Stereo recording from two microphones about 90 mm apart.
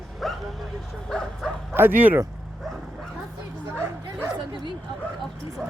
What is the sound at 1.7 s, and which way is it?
Speech, 20° right (ahead or behind).